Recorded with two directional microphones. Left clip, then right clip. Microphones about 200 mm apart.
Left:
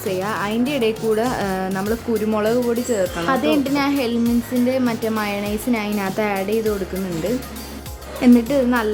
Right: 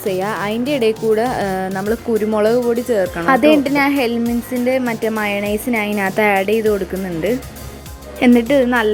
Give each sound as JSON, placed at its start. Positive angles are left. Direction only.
{"t": 0.1, "sound": "a woman's voice", "side_deg": -20}
{"t": 8.2, "sound": "a woman's voice", "side_deg": -20}